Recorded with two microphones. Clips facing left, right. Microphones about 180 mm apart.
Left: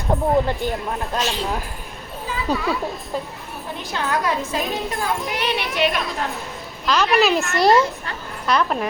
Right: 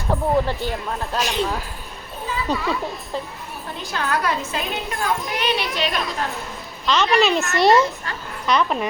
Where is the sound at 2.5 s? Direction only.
10° left (ahead or behind).